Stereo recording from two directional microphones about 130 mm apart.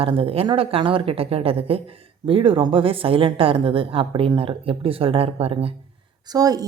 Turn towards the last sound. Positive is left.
turn(degrees=-30)  # may be behind; listen again after turning